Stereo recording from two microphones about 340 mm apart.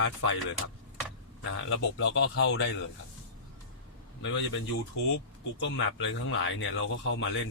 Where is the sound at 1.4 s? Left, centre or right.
Left.